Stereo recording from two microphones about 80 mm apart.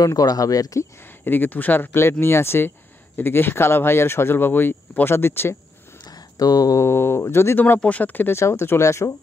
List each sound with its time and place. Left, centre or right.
0.0 s speech: left
1.2 s speech: left
6.0 s speech: left
8.4 s speech: left